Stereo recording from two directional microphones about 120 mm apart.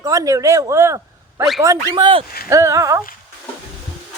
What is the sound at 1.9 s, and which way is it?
Speech, 45° right (ahead or behind).